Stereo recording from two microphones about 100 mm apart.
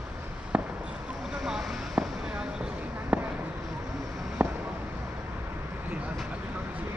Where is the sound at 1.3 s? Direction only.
5° right (ahead or behind).